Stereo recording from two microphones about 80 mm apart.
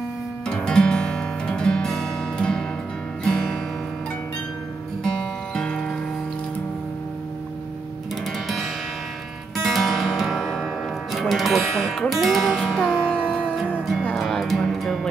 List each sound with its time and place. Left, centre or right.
0.5 s music: centre
5.0 s music: centre
9.6 s music: centre
14.1 s music: centre